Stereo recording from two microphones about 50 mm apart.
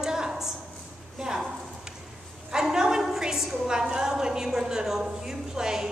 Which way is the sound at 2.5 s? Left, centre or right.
Centre.